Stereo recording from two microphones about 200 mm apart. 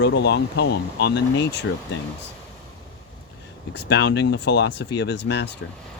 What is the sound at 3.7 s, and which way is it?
Speech, 60° left (ahead or behind).